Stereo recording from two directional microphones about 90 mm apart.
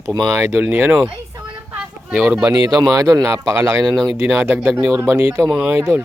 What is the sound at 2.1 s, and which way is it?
Speech, 10° right (ahead or behind).